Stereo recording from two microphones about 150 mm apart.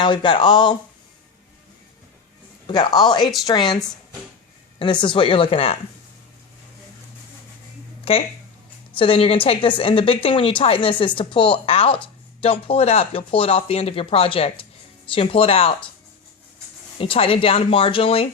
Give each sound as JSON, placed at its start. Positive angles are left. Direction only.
{"t": 0.0, "sound": "speech", "side_deg": 30}
{"t": 2.6, "sound": "a woman's voice", "side_deg": 30}
{"t": 8.1, "sound": "speech", "side_deg": 40}
{"t": 17.0, "sound": "speech", "side_deg": 40}